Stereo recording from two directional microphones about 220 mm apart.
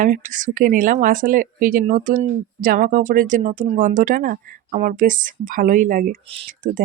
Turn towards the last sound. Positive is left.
turn(degrees=-35)  # may be behind; listen again after turning